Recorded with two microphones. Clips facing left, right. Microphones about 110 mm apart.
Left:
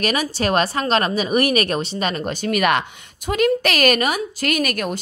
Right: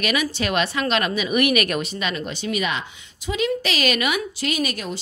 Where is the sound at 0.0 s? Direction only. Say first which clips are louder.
Left 2 dB; 40° left (ahead or behind).